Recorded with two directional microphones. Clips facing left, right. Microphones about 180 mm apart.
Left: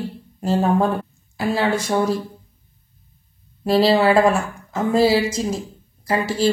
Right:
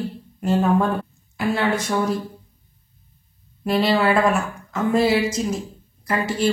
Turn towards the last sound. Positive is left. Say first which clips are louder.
# left 2 dB
turn(degrees=30)  # may be behind; listen again after turning